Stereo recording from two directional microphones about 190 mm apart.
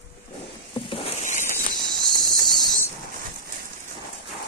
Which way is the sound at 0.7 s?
30° left (ahead or behind).